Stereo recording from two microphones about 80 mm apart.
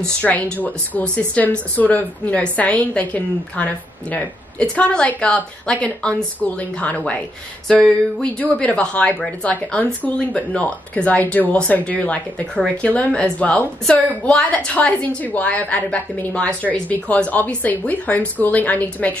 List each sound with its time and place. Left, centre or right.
0.0 s a woman's voice: centre